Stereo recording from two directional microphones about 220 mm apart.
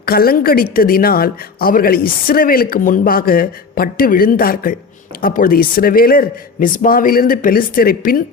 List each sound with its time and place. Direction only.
0.0 s a woman's voice: 45° left (ahead or behind)